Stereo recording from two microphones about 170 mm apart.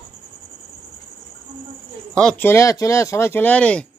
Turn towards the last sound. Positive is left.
turn(degrees=5)  # may be behind; listen again after turning